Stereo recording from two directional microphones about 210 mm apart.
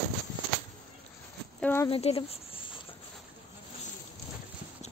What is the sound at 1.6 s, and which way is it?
Speech, 10° left (ahead or behind).